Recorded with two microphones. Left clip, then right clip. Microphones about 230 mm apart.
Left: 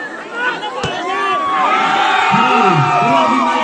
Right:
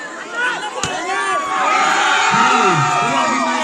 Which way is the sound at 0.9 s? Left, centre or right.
Right.